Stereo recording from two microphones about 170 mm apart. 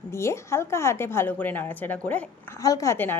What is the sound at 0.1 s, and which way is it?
A woman's voice, 15° left (ahead or behind).